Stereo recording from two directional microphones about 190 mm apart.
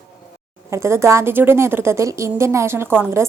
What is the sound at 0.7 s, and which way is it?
A woman's voice, 15° right (ahead or behind).